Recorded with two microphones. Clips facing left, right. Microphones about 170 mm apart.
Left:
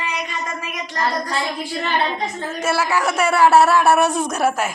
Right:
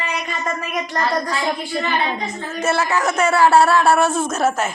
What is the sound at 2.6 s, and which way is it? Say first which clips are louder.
Speech: right 1 dB; 10° left (ahead or behind).